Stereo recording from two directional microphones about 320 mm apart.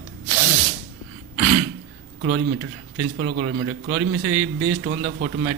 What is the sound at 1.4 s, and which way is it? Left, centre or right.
Throat clearing, right.